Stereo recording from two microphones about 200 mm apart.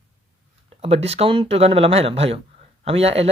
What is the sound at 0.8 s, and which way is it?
Speech, 30° right (ahead or behind).